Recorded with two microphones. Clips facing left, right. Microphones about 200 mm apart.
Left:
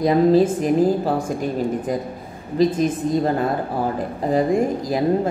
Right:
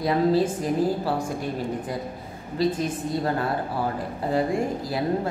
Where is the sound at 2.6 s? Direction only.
20° left (ahead or behind).